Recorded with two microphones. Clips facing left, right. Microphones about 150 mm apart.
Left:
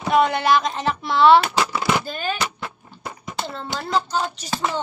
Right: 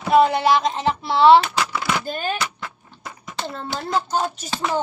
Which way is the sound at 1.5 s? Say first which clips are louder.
Left 2 dB; 25° left (ahead or behind).